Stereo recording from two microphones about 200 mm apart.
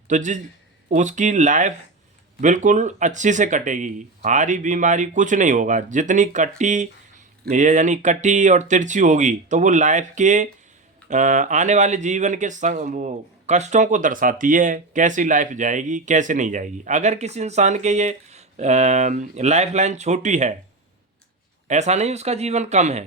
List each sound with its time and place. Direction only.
0.1 s speech: 40° right (ahead or behind)
21.7 s speech: 35° right (ahead or behind)